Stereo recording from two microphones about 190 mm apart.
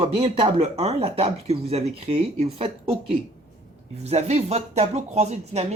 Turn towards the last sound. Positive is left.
turn(degrees=-35)  # may be behind; listen again after turning